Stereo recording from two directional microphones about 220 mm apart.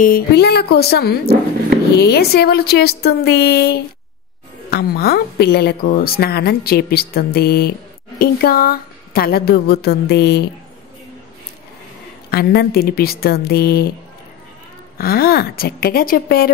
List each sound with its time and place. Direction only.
0.0 s speech: 45° left (ahead or behind)
12.3 s speech: 45° left (ahead or behind)
15.0 s speech: 45° left (ahead or behind)